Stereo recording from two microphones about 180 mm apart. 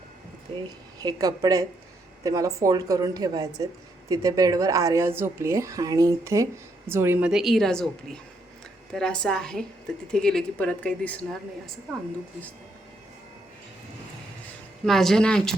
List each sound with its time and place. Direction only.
0.5 s speech: 30° right (ahead or behind)
0.9 s a woman's voice: 20° right (ahead or behind); by 11.7 s 5° left (ahead or behind)
14.8 s a woman's voice: centre (ahead or behind)